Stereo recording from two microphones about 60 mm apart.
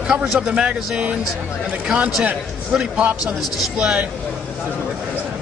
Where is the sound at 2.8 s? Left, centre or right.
Right.